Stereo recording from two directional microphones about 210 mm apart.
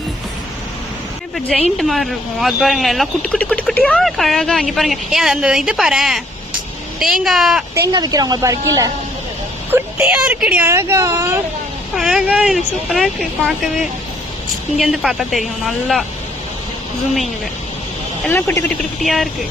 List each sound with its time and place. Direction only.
1.8 s speech: centre (ahead or behind)
7.8 s speech: 15° right (ahead or behind)
11.9 s speech: centre (ahead or behind)
14.8 s speech: centre (ahead or behind)
18.3 s speech: 10° left (ahead or behind)